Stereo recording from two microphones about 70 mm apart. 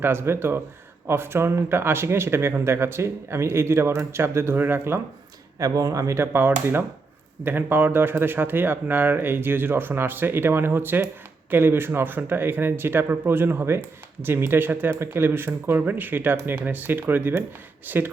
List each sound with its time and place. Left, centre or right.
0.0 s speech: right
5.5 s speech: right